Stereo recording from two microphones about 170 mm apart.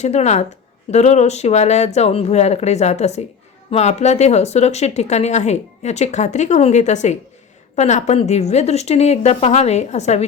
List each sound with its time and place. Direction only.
0.0 s speech: 40° left (ahead or behind)